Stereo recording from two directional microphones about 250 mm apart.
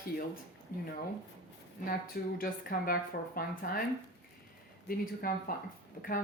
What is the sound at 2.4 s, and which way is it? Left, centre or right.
Speech, left.